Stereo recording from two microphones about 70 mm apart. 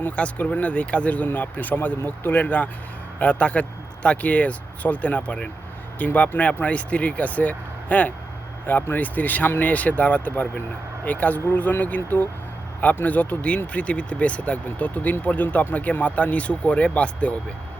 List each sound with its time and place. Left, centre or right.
0.0 s speech: left